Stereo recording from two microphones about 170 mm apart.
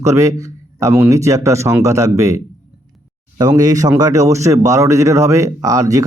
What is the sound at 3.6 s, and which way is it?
Speech, 20° right (ahead or behind).